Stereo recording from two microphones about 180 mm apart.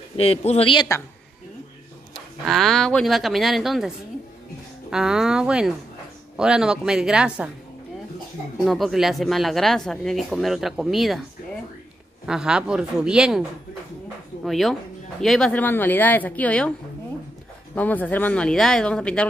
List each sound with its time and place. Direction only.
0.2 s speech: 35° left (ahead or behind)
2.1 s speech: centre (ahead or behind)
4.9 s speech: 5° right (ahead or behind)
8.6 s speech: centre (ahead or behind)
12.3 s speech: 5° right (ahead or behind)
14.4 s speech: centre (ahead or behind)
17.7 s speech: 10° left (ahead or behind)